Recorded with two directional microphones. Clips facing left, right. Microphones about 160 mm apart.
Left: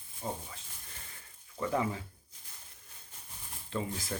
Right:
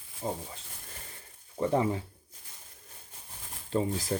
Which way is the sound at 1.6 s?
30° right (ahead or behind).